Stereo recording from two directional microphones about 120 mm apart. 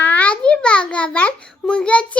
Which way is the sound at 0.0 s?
15° left (ahead or behind).